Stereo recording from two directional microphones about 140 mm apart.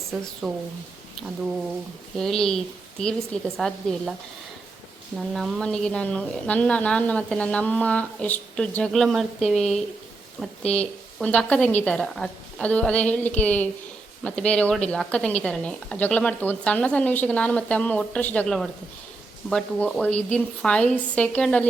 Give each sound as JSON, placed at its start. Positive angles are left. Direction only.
{"t": 0.4, "sound": "a woman's voice", "side_deg": 0}
{"t": 2.1, "sound": "a woman's voice", "side_deg": 5}
{"t": 3.6, "sound": "a woman's voice", "side_deg": 5}
{"t": 5.1, "sound": "a woman's voice", "side_deg": 0}
{"t": 10.6, "sound": "speech", "side_deg": 50}
{"t": 11.2, "sound": "a woman's voice", "side_deg": 10}